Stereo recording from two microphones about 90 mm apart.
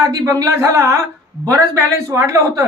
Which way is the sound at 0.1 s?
40° right (ahead or behind).